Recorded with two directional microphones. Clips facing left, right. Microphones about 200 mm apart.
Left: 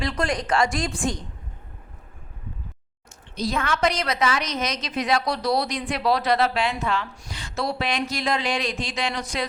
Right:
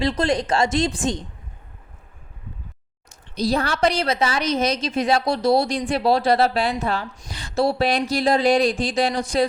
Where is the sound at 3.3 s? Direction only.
35° right (ahead or behind).